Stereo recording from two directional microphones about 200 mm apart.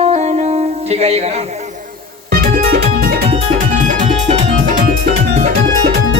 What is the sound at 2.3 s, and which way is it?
Music, 45° right (ahead or behind).